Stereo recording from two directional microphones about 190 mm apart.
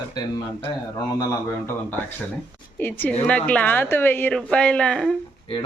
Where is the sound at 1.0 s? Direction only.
15° left (ahead or behind).